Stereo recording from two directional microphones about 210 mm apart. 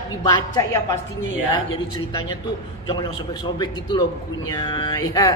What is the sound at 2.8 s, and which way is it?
A man's voice, 20° left (ahead or behind).